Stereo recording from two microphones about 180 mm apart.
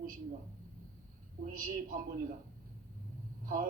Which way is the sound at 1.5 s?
50° right (ahead or behind).